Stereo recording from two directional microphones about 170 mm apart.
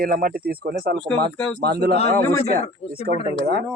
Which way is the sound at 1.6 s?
70° right (ahead or behind).